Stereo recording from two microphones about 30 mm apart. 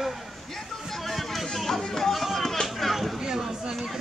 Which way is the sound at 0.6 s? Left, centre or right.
Centre.